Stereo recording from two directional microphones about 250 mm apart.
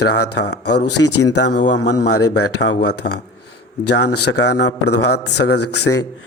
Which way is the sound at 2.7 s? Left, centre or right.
Left.